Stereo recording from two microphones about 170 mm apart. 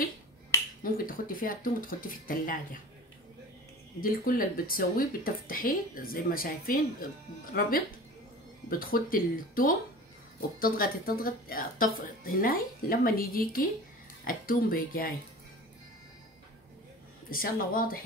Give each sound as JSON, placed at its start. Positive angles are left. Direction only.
{"t": 0.5, "sound": "finger snapping", "side_deg": 15}
{"t": 0.8, "sound": "speech", "side_deg": 55}
{"t": 4.0, "sound": "speech", "side_deg": 55}
{"t": 8.6, "sound": "speech", "side_deg": 60}
{"t": 17.3, "sound": "speech", "side_deg": 60}